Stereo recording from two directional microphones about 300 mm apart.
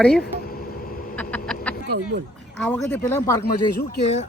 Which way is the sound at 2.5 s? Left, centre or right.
Centre.